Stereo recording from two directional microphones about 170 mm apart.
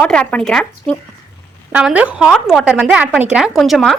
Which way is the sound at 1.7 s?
10° right (ahead or behind).